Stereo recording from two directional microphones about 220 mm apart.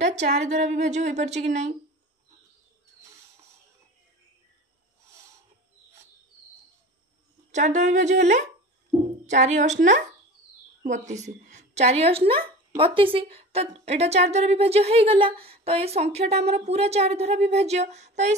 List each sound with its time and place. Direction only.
0.0 s a woman's voice: 30° right (ahead or behind)
7.5 s a woman's voice: 30° right (ahead or behind)